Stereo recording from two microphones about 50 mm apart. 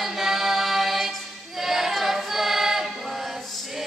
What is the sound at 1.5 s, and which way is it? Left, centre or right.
Choir, centre.